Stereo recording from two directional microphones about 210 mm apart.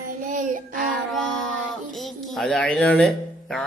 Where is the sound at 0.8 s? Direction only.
Centre (ahead or behind).